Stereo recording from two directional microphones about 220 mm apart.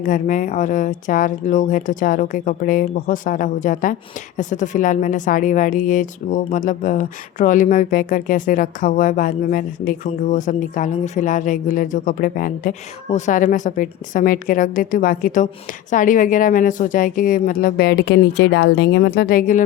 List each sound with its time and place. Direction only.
0.0 s a woman's voice: 35° left (ahead or behind)